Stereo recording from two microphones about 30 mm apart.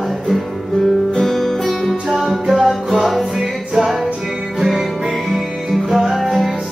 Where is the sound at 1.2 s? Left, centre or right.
Centre.